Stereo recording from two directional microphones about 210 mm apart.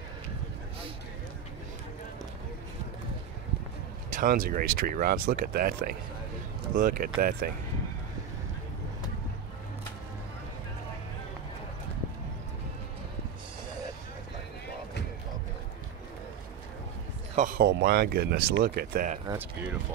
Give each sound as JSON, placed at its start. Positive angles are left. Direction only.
{"t": 4.1, "sound": "speech", "side_deg": -40}
{"t": 17.4, "sound": "speech", "side_deg": -45}
{"t": 19.2, "sound": "speech", "side_deg": -10}